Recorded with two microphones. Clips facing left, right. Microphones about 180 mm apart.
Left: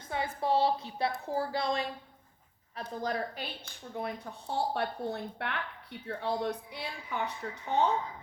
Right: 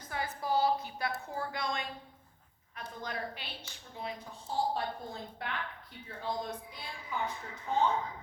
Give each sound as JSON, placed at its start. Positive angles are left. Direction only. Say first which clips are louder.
{"t": 0.1, "sound": "a sound", "louder": "left 3 dB", "side_deg": 25}
{"t": 0.4, "sound": "a woman's voice", "louder": "left 2 dB", "side_deg": 30}
{"t": 3.9, "sound": "a woman's voice", "louder": "left 4 dB", "side_deg": 60}